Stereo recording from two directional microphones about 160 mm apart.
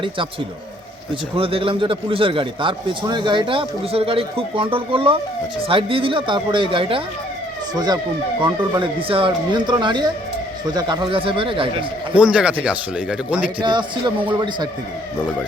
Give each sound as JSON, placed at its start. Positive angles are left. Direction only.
{"t": 1.4, "sound": "a man's voice", "side_deg": -35}
{"t": 8.4, "sound": "a man's voice", "side_deg": -30}
{"t": 12.1, "sound": "speech", "side_deg": -5}
{"t": 13.6, "sound": "speech", "side_deg": -30}